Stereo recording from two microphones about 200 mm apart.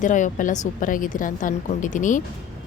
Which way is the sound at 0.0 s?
40° left (ahead or behind).